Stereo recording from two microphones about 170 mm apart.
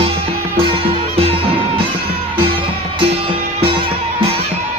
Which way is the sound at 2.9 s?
35° right (ahead or behind).